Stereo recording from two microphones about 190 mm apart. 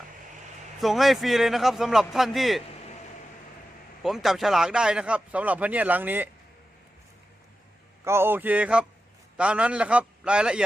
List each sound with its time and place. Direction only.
0.8 s a man's voice: centre (ahead or behind)
4.0 s speech: centre (ahead or behind)
8.0 s a man's voice: 15° right (ahead or behind)